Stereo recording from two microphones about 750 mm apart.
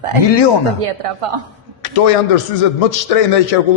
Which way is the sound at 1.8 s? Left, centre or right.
Left.